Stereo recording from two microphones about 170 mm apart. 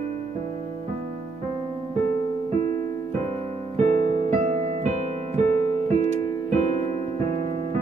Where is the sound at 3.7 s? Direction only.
40° right (ahead or behind).